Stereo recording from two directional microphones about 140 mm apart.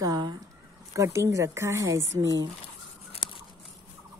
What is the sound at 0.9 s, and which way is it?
Speech, 20° right (ahead or behind).